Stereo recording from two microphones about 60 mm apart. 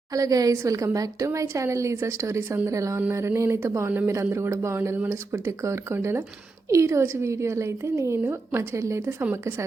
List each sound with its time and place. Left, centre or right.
0.1 s a woman's voice: right